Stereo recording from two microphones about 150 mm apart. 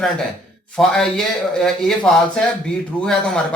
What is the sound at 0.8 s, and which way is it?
A man's voice, 5° left (ahead or behind).